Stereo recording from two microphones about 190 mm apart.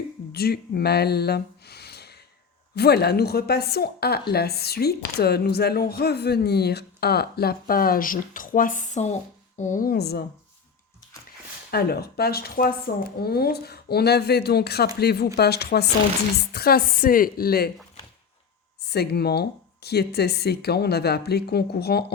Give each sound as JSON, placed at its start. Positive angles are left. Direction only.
{"t": 0.3, "sound": "a woman's voice", "side_deg": 55}
{"t": 11.7, "sound": "a woman's voice", "side_deg": 55}
{"t": 18.8, "sound": "a woman's voice", "side_deg": 60}